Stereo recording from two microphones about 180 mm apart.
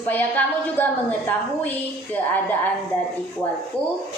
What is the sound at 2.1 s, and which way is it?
Speech, 10° left (ahead or behind).